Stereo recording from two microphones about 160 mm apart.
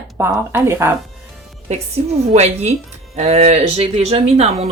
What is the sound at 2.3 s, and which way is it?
Speech, 40° right (ahead or behind).